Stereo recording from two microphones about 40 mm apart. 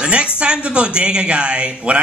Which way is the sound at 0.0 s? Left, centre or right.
Right.